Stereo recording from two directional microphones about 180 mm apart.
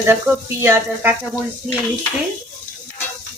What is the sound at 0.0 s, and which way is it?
Speech, 15° right (ahead or behind).